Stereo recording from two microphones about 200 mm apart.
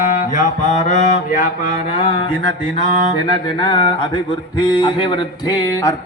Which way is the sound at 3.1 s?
20° left (ahead or behind).